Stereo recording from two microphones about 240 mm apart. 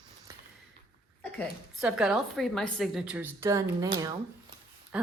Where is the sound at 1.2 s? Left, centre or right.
Centre.